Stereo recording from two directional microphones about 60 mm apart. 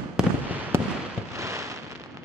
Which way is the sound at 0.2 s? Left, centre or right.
Centre.